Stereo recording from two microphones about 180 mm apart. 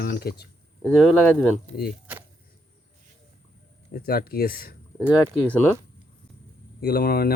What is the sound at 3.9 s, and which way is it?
Speech, 60° left (ahead or behind).